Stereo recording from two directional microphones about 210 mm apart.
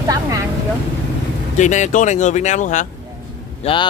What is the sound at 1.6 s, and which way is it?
Speech, 35° left (ahead or behind).